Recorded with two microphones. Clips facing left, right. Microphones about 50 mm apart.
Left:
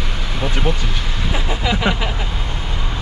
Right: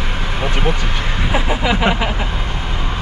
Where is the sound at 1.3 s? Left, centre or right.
Centre.